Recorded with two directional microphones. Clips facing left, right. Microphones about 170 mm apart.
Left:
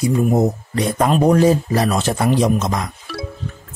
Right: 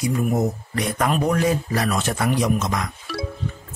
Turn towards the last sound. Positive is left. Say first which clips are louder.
# even
turn(degrees=0)  # may be behind; listen again after turning